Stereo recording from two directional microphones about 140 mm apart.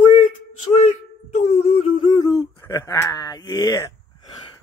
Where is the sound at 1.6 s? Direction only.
40° left (ahead or behind).